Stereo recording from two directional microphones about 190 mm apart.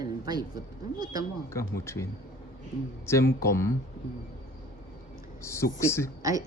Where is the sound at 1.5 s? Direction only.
15° left (ahead or behind).